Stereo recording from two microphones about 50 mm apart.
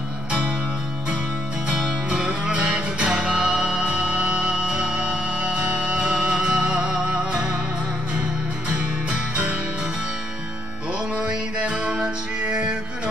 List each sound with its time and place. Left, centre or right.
2.2 s music: right
8.6 s music: right
11.1 s music: right